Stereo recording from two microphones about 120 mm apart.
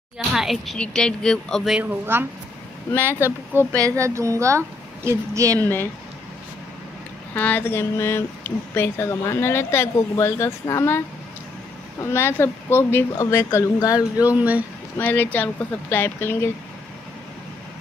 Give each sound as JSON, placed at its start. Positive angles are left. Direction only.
{"t": 0.3, "sound": "speech", "side_deg": 0}
{"t": 1.8, "sound": "a woman's voice", "side_deg": -15}
{"t": 5.6, "sound": "speech", "side_deg": 15}
{"t": 7.3, "sound": "speech", "side_deg": 15}
{"t": 12.0, "sound": "speech", "side_deg": 20}
{"t": 14.1, "sound": "speech", "side_deg": -10}
{"t": 15.0, "sound": "speech", "side_deg": 15}